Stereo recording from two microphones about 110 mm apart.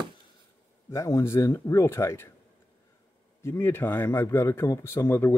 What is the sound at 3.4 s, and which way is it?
Speech, 25° left (ahead or behind).